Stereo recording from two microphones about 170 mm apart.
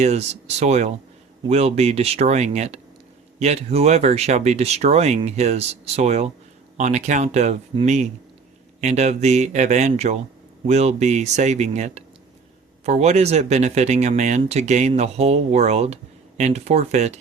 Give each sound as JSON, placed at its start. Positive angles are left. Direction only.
{"t": 0.0, "sound": "speech", "side_deg": -40}